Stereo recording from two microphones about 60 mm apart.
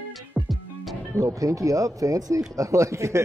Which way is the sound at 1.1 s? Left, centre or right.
Right.